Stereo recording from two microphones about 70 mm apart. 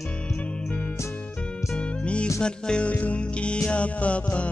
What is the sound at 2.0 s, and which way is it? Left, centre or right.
Music, centre.